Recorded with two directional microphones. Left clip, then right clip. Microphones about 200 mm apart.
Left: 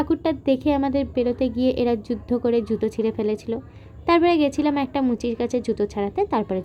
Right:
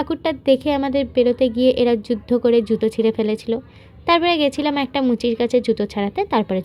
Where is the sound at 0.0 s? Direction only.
20° right (ahead or behind).